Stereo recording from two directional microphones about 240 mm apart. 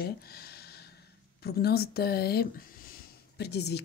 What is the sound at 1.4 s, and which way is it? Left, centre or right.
Speech, left.